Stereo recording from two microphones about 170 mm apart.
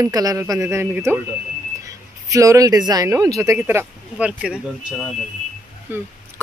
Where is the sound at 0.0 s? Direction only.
20° right (ahead or behind).